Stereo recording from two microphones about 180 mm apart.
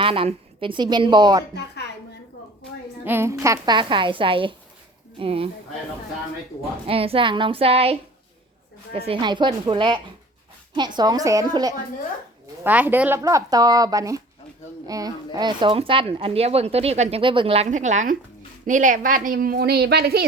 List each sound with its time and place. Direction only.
0.0 s a woman's voice: 30° right (ahead or behind)
3.0 s a woman's voice: 10° right (ahead or behind); by 5.5 s 30° right (ahead or behind)
6.8 s speech: 30° right (ahead or behind)
9.0 s a woman's voice: 30° right (ahead or behind); by 20.2 s 60° right (ahead or behind)